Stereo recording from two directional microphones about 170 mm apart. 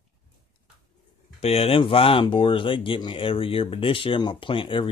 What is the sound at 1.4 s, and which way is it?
Speech, 35° left (ahead or behind).